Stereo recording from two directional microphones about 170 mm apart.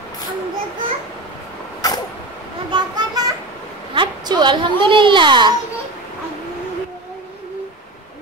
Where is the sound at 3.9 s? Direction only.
25° right (ahead or behind).